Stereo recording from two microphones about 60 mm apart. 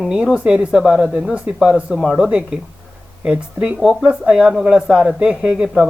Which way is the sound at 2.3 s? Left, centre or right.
Centre.